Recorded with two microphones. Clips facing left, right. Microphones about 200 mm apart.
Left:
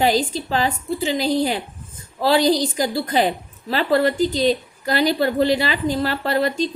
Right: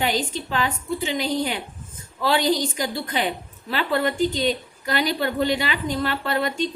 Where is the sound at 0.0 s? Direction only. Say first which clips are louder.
Left 5 dB; 35° left (ahead or behind).